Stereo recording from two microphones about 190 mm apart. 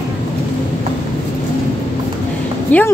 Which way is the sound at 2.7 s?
10° left (ahead or behind).